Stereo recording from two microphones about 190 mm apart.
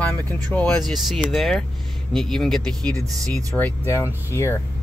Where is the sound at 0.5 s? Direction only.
10° left (ahead or behind).